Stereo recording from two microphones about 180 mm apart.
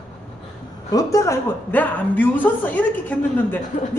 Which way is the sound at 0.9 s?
20° left (ahead or behind).